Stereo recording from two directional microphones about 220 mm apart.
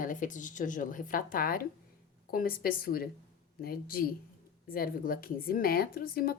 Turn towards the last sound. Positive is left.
turn(degrees=40)  # may be behind; listen again after turning